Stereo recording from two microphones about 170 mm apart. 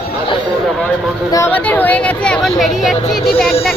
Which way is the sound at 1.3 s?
15° left (ahead or behind).